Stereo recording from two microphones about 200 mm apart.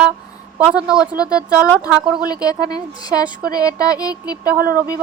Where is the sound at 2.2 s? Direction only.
20° left (ahead or behind).